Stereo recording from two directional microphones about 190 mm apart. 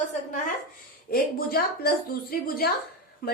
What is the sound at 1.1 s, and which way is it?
A woman's voice, 55° left (ahead or behind).